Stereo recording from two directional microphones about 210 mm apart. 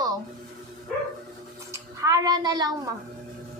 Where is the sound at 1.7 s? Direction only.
15° right (ahead or behind).